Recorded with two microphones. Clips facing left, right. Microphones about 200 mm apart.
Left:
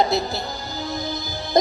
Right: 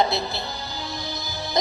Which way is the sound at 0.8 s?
50° left (ahead or behind).